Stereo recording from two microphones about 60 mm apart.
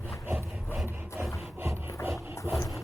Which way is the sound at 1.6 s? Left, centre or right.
Right.